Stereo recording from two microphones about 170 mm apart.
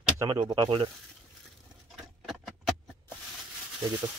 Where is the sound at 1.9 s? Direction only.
Centre (ahead or behind).